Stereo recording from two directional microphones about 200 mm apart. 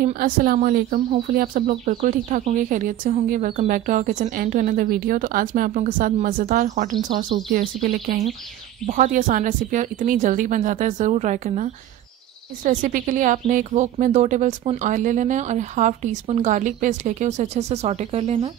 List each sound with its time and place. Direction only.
0.0 s speech: 45° right (ahead or behind)